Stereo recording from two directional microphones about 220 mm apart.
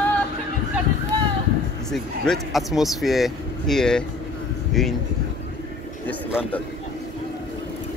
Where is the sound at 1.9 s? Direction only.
Centre (ahead or behind).